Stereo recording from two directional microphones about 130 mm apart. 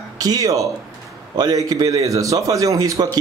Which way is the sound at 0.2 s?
30° right (ahead or behind).